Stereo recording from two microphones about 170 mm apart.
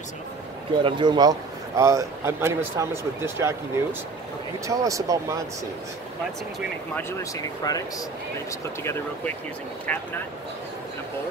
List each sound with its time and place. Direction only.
0.8 s a man's voice: 25° right (ahead or behind)
7.6 s speech: 25° left (ahead or behind)
8.8 s speech: 15° left (ahead or behind)